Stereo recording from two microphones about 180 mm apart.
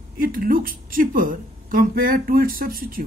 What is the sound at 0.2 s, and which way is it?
Speech, 50° right (ahead or behind).